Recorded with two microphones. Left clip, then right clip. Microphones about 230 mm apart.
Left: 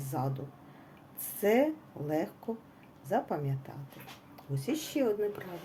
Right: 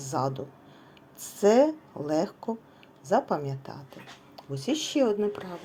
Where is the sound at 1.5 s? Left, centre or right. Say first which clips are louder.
Right 5 dB; centre.